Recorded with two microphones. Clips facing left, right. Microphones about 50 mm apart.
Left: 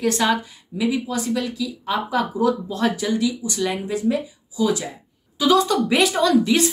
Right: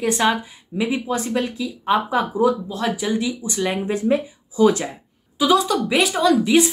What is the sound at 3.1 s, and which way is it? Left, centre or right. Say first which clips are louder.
Speech: left 1 dB; right.